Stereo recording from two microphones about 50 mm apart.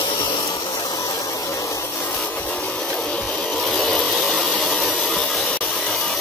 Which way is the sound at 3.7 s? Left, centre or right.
Centre.